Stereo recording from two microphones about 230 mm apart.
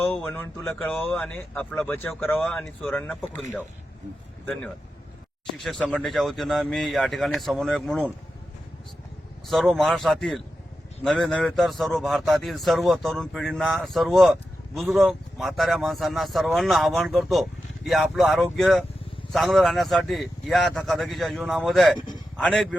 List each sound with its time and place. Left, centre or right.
0.0 s speech: centre
5.5 s speech: centre
9.5 s speech: centre
21.9 s speech: centre
22.4 s speech: centre